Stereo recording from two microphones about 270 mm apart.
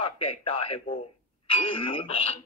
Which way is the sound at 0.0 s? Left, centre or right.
Centre.